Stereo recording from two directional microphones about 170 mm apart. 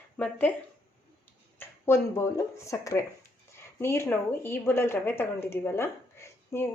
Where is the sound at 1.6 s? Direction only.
15° left (ahead or behind).